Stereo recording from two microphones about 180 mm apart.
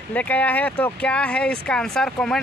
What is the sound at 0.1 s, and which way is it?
Speech, 10° left (ahead or behind).